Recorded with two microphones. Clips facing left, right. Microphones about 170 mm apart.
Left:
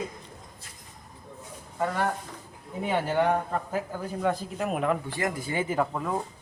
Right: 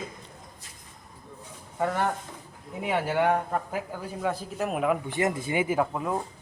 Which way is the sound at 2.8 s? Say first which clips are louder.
Even; 10° right (ahead or behind).